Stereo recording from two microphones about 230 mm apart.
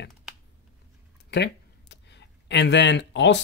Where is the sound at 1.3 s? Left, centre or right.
Left.